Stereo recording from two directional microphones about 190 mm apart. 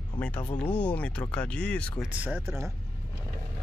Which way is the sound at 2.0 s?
10° right (ahead or behind).